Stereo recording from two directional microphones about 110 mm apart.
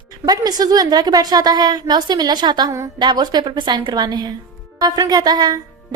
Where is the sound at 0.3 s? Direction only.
35° right (ahead or behind).